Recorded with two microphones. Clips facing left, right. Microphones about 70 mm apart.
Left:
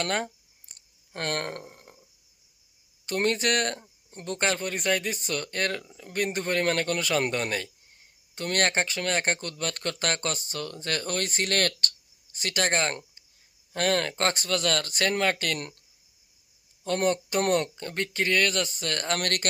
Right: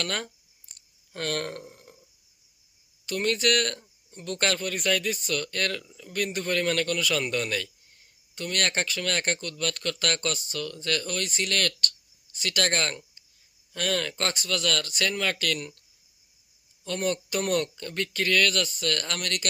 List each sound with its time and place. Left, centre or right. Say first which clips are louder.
0.0 s speech: left 3 dB; left
3.1 s speech: even; left
4.1 s speech: even; left
4.4 s speech: even; left
16.8 s speech: left 3 dB; left
19.2 s speech: left 3 dB; left